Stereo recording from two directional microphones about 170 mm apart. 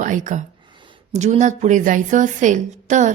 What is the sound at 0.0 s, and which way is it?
A woman's voice, 50° right (ahead or behind).